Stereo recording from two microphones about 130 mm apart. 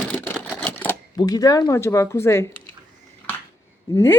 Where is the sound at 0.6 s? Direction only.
10° left (ahead or behind).